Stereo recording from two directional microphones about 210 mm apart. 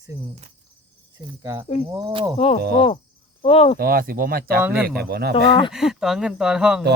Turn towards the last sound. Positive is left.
turn(degrees=-5)  # may be behind; listen again after turning